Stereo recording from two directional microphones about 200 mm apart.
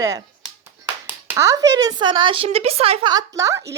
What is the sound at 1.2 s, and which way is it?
A woman's voice, 15° right (ahead or behind).